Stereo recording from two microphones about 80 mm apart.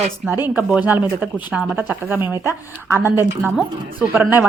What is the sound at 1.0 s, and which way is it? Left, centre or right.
Speech, right.